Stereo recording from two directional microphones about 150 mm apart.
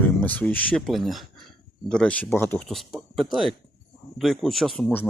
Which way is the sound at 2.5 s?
Centre (ahead or behind).